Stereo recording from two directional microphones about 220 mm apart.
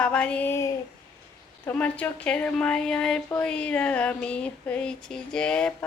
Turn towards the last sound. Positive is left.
turn(degrees=5)  # may be behind; listen again after turning